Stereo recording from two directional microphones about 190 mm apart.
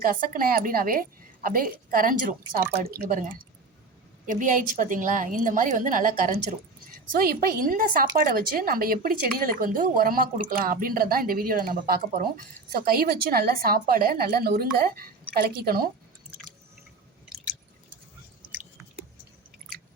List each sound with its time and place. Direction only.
0.0 s speech: 50° right (ahead or behind)